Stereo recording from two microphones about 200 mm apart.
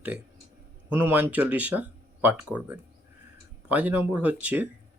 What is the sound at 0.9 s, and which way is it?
Speech, 10° right (ahead or behind).